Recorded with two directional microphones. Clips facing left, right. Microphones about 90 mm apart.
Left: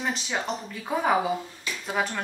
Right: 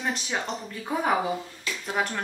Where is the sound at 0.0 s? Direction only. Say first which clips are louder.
Even; centre (ahead or behind).